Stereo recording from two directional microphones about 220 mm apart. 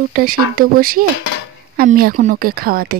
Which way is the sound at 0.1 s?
40° right (ahead or behind).